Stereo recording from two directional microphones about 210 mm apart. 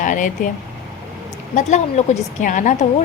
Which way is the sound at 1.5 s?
35° left (ahead or behind).